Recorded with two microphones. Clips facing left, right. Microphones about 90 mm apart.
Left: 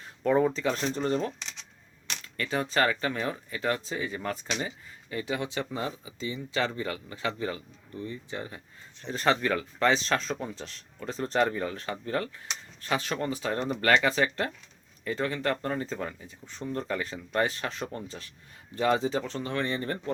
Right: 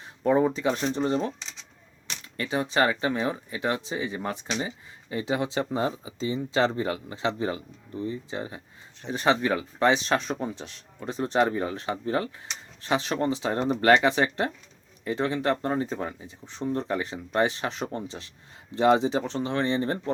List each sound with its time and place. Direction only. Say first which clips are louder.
0.0 s speech: right 2 dB; 15° right (ahead or behind)